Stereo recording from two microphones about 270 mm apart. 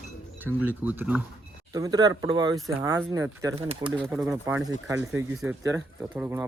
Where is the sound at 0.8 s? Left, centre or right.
Centre.